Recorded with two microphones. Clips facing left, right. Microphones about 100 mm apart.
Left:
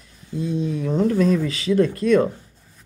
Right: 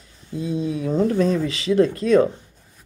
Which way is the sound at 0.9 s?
40° right (ahead or behind).